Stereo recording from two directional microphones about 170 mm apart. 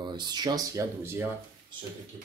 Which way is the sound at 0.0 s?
25° right (ahead or behind).